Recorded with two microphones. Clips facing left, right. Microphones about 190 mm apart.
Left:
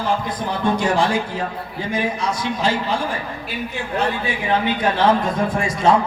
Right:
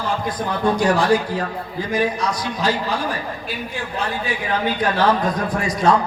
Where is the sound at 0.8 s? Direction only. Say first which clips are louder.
Right 2 dB; 25° left (ahead or behind).